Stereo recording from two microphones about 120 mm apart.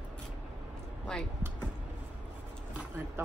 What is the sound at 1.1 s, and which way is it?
Speech, 5° left (ahead or behind).